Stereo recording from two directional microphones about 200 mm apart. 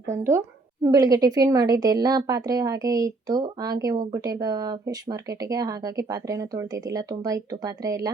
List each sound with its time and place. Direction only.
0.1 s a woman's voice: 15° right (ahead or behind)